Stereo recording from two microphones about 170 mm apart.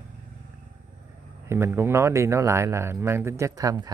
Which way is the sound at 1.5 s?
15° right (ahead or behind).